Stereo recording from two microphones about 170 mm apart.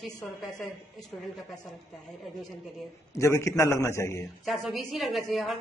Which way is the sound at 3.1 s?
15° left (ahead or behind).